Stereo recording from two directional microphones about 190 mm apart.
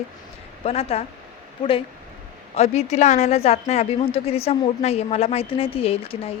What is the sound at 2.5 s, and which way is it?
A woman's voice, 35° left (ahead or behind).